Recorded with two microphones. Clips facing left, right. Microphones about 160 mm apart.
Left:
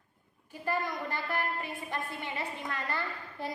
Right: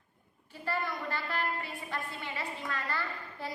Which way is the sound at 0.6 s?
20° left (ahead or behind).